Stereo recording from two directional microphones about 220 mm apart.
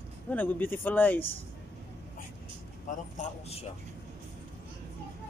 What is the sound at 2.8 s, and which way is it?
Speech, 35° left (ahead or behind).